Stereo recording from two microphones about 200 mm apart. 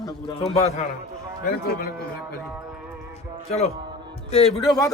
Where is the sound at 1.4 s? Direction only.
45° left (ahead or behind).